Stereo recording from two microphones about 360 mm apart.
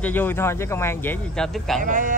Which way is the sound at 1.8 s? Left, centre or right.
Right.